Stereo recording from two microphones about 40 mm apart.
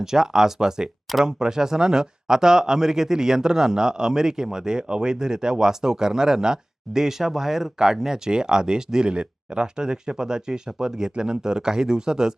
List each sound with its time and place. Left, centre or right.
0.0 s speech: centre